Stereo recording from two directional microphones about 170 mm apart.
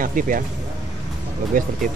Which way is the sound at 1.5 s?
55° right (ahead or behind).